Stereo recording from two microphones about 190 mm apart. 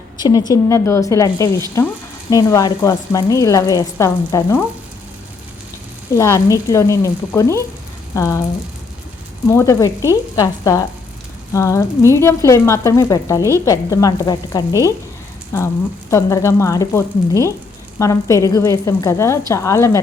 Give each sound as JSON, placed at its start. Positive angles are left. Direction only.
{"t": 0.2, "sound": "frying", "side_deg": 20}
{"t": 6.1, "sound": "frying", "side_deg": 15}
{"t": 9.5, "sound": "frying", "side_deg": 15}
{"t": 13.5, "sound": "speech", "side_deg": 20}
{"t": 15.5, "sound": "frying", "side_deg": 15}